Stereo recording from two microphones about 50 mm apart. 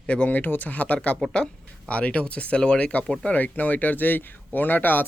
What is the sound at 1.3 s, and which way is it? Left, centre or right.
Speech, left.